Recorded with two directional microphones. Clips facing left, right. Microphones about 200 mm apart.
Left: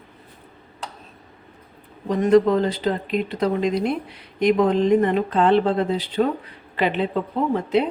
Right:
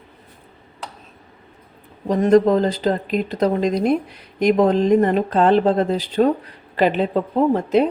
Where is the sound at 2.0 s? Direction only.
40° right (ahead or behind).